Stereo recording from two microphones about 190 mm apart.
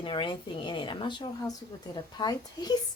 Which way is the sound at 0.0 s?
25° left (ahead or behind).